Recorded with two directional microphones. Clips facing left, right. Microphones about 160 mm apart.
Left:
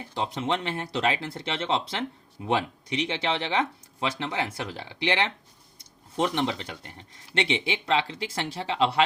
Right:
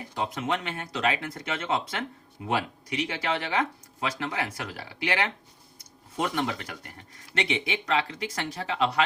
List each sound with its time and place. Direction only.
0.1 s speech: 30° left (ahead or behind)